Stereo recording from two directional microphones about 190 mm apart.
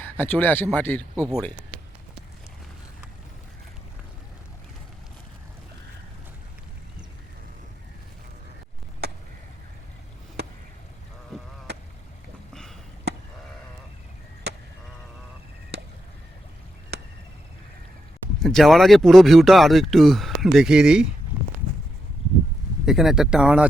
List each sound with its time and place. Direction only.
0.0 s speech: 10° left (ahead or behind)
9.0 s chop: 60° right (ahead or behind)
10.4 s a sound: 60° right (ahead or behind)
11.7 s duck: 60° right (ahead or behind)
13.1 s sheep: 60° right (ahead or behind)
14.5 s a sound: 60° right (ahead or behind)
15.7 s chop: 65° right (ahead or behind)
18.3 s speech: centre (ahead or behind)
22.9 s speech: 5° right (ahead or behind)